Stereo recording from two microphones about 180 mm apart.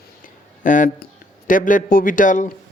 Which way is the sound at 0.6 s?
45° left (ahead or behind).